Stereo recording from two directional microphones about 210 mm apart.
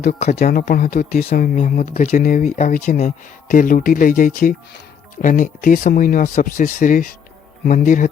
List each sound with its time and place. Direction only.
0.1 s speech: 30° left (ahead or behind)
0.6 s speech: 45° left (ahead or behind)
1.2 s speech: 35° left (ahead or behind)